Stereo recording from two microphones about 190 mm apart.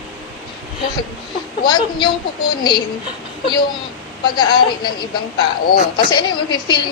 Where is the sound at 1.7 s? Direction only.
25° left (ahead or behind).